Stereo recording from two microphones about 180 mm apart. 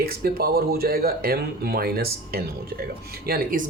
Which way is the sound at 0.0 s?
55° right (ahead or behind).